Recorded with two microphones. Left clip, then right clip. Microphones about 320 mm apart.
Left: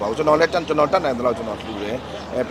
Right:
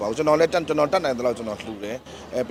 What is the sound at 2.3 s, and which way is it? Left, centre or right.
Speech, right.